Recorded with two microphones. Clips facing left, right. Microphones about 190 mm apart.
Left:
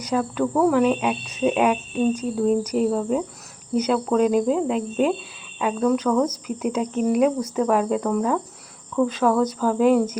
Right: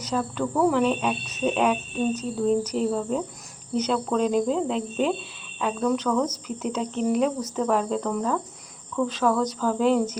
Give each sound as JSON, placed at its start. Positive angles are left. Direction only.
{"t": 0.0, "sound": "speech", "side_deg": 10}